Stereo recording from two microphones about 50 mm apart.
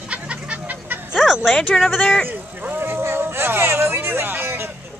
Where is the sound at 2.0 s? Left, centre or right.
Centre.